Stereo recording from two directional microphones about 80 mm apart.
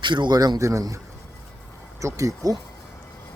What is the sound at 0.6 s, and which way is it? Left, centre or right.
Speech, right.